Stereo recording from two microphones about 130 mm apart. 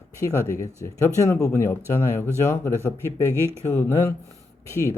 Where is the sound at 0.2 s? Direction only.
20° left (ahead or behind).